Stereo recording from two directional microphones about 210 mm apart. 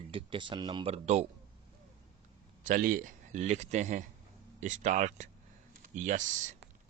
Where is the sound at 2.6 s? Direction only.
40° right (ahead or behind).